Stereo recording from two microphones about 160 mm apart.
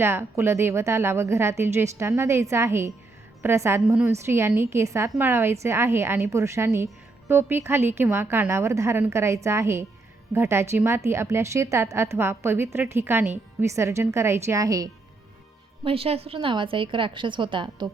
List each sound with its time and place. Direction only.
0.0 s a woman's voice: 15° right (ahead or behind)
15.8 s a woman's voice: 35° right (ahead or behind)